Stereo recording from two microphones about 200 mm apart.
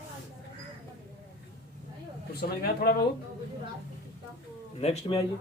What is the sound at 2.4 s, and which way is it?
Speech, 50° left (ahead or behind).